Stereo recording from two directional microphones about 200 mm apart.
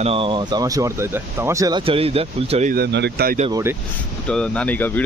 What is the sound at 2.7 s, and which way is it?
Speech, 55° right (ahead or behind).